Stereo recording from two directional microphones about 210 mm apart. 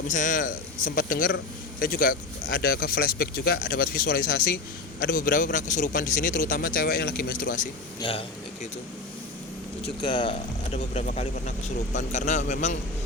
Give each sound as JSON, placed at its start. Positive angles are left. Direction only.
{"t": 0.1, "sound": "a man's voice", "side_deg": 35}
{"t": 8.0, "sound": "speech", "side_deg": 25}
{"t": 10.0, "sound": "a man's voice", "side_deg": 20}